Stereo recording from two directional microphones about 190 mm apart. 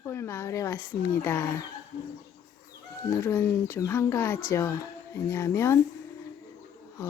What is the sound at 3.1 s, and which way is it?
Speech, 15° left (ahead or behind).